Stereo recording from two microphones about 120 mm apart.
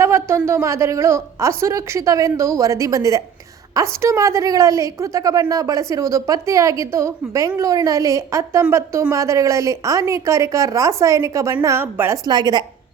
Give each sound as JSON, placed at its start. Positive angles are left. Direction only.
{"t": 0.0, "sound": "a woman's voice", "side_deg": -20}